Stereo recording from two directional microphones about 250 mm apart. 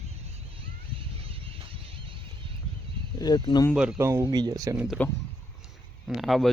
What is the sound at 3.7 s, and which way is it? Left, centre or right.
Speech, centre.